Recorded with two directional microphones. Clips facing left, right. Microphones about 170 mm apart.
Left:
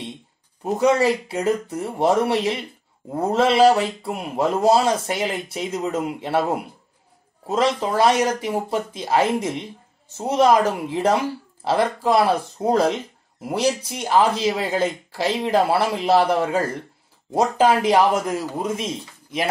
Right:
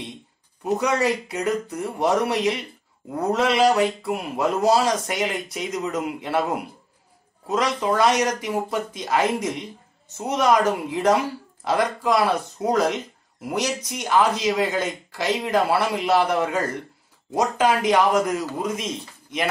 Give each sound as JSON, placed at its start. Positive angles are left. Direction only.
{"t": 0.7, "sound": "a man's voice", "side_deg": 30}
{"t": 7.4, "sound": "a man's voice", "side_deg": 30}